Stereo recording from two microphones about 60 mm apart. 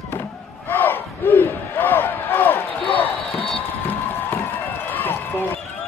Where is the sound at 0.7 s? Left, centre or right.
Left.